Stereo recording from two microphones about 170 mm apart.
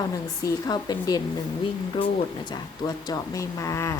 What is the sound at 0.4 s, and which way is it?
Speech, 25° left (ahead or behind).